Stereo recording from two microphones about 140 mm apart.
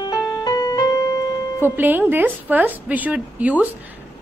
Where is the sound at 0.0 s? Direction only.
25° left (ahead or behind).